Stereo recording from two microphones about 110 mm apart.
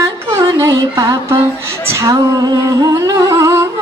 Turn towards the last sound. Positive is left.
turn(degrees=-30)  # may be behind; listen again after turning